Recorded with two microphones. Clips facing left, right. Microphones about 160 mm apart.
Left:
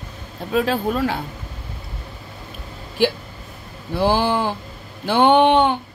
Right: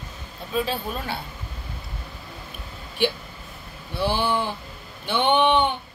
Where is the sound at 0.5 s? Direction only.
90° left.